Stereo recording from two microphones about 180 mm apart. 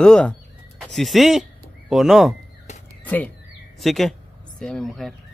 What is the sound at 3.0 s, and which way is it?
Speech, 10° left (ahead or behind).